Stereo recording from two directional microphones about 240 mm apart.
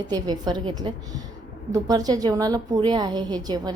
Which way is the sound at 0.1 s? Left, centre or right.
Centre.